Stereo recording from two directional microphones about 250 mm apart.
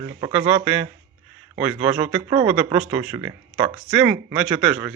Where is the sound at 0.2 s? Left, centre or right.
Right.